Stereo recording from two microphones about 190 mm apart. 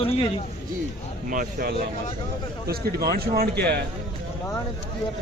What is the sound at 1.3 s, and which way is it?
A man's voice, 45° right (ahead or behind).